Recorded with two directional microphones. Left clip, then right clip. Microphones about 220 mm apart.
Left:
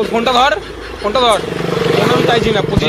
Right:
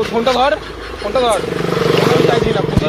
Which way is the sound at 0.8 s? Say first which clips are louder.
Left 6 dB; centre (ahead or behind).